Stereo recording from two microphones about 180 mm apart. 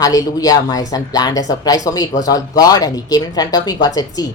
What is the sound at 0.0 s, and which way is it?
Speech, 20° left (ahead or behind).